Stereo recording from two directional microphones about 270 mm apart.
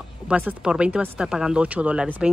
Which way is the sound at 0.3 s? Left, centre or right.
Centre.